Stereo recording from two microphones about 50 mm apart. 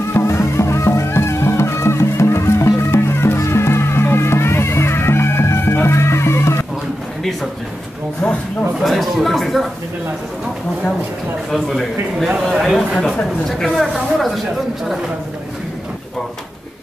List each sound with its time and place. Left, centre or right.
0.1 s music: left
8.2 s speech: left
8.7 s speech: centre
11.5 s speech: centre